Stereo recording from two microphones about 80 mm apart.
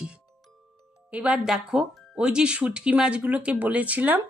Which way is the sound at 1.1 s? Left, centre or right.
Centre.